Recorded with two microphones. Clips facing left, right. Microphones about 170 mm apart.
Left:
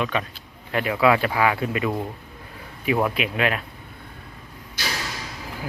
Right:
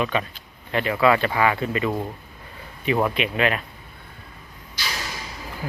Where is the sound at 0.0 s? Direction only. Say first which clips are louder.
Right 1 dB; centre (ahead or behind).